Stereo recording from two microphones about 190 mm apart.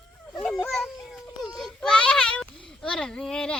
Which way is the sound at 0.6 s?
Centre (ahead or behind).